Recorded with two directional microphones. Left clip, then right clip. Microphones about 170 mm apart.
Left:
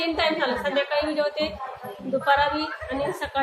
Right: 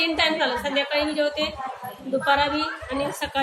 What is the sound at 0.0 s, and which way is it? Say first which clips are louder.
A woman's voice: right 2 dB; 20° left (ahead or behind).